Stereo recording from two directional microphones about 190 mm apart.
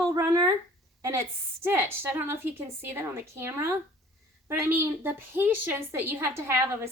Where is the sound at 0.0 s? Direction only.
15° right (ahead or behind).